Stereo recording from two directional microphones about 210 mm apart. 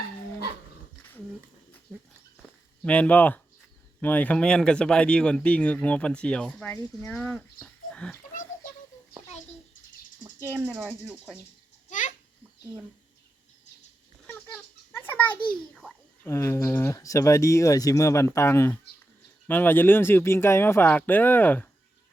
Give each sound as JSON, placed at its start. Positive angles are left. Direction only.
{"t": 2.8, "sound": "a child's voice", "side_deg": 5}
{"t": 10.2, "sound": "speech", "side_deg": -10}
{"t": 11.9, "sound": "babbling", "side_deg": 35}
{"t": 14.9, "sound": "a sound", "side_deg": 10}
{"t": 15.4, "sound": "a child's voice", "side_deg": 5}